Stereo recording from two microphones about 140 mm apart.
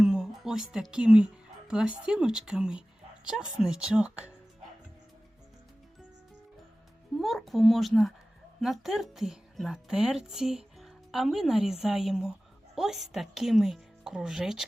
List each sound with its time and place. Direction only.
0.0 s a woman's voice: 5° right (ahead or behind)
7.2 s a woman's voice: centre (ahead or behind)